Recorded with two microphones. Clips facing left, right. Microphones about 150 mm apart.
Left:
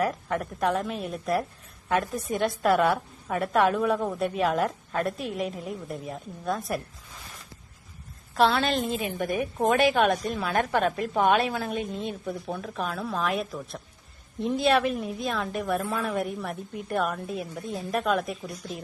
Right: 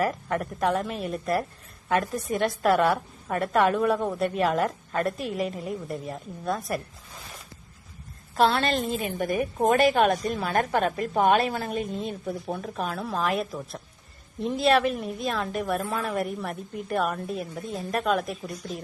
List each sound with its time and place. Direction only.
0.0 s a woman's voice: centre (ahead or behind)
8.4 s a woman's voice: centre (ahead or behind)